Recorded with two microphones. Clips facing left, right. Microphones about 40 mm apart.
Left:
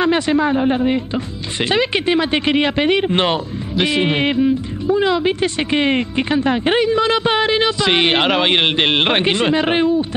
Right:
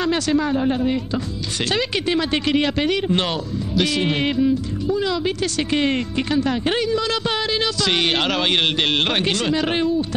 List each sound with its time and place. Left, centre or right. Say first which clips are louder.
0.0 s speech: left 4 dB; left